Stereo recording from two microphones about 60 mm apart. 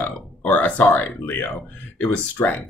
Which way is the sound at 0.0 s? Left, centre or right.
Left.